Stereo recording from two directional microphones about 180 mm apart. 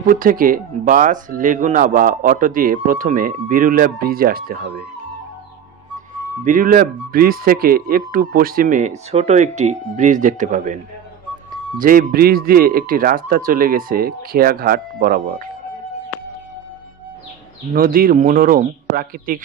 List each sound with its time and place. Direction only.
0.0 s speech: 50° right (ahead or behind)
6.4 s speech: 50° right (ahead or behind)
11.8 s speech: 50° right (ahead or behind)
17.7 s speech: 50° right (ahead or behind)